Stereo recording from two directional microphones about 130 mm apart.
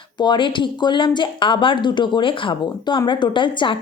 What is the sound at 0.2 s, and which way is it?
Speech, 35° left (ahead or behind).